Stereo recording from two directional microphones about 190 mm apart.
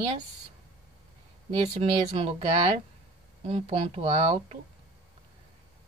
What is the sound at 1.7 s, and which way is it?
Speech, 35° right (ahead or behind).